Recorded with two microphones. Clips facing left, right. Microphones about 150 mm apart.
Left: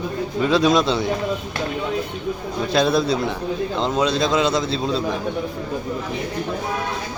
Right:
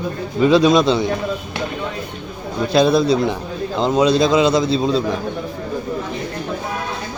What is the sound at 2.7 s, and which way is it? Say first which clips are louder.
A man's voice: right 4 dB; centre (ahead or behind).